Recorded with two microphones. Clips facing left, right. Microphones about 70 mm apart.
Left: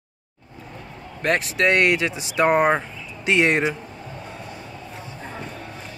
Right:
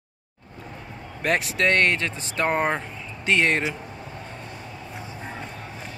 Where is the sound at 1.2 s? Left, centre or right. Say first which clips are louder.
Left 2 dB; centre.